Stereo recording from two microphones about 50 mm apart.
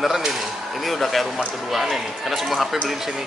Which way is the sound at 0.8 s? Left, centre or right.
Centre.